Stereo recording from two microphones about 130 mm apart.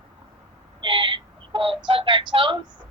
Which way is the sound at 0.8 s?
40° right (ahead or behind).